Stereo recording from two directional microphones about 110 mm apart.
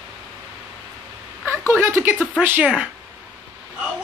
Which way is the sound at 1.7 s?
20° right (ahead or behind).